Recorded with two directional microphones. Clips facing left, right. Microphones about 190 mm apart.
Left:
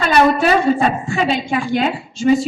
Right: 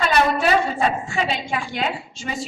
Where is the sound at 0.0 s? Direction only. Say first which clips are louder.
Left 5 dB; 45° left (ahead or behind).